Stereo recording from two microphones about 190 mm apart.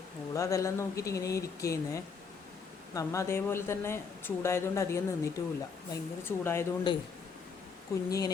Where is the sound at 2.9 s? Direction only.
15° left (ahead or behind).